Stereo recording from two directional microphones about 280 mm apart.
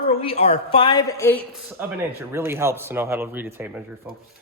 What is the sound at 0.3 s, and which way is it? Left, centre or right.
A man's voice, left.